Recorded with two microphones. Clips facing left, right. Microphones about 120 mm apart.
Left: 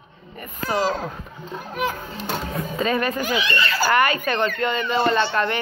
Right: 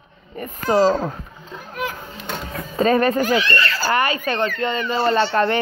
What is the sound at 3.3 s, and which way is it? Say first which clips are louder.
Speech: right 3 dB; 15° left (ahead or behind).